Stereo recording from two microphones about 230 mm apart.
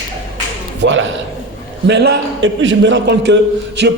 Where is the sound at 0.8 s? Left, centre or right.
Right.